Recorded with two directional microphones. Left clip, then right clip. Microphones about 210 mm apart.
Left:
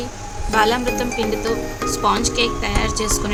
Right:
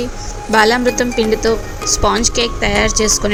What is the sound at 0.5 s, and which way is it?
Speech, 25° right (ahead or behind).